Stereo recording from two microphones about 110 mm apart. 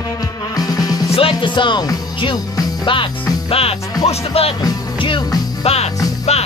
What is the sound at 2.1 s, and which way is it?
Music, 50° left (ahead or behind).